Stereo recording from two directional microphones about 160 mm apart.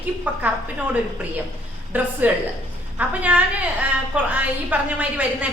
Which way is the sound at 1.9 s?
10° right (ahead or behind).